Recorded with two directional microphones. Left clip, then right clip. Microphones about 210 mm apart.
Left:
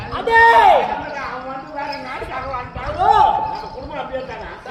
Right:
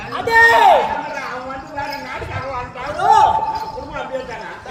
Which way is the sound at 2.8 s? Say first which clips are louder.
Right 1 dB; centre (ahead or behind).